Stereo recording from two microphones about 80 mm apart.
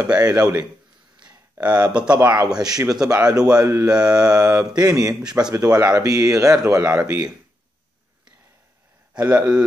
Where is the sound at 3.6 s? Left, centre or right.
Right.